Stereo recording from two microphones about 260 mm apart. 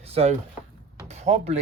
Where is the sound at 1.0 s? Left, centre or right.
Right.